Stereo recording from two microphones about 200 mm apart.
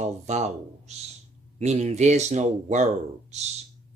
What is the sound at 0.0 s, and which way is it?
Speech, 35° right (ahead or behind).